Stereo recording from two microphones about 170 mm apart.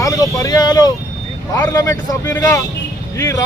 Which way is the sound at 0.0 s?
20° left (ahead or behind).